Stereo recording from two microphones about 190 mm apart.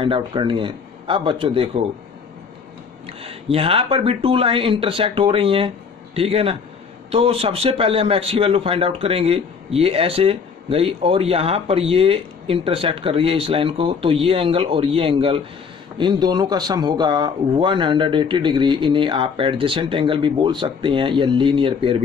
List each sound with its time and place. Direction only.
0.0 s speech: 25° right (ahead or behind)
3.1 s a man's voice: 30° right (ahead or behind)